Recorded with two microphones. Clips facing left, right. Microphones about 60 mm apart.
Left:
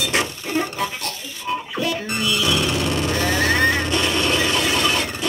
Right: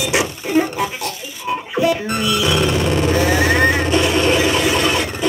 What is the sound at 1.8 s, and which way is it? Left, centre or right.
Music, centre.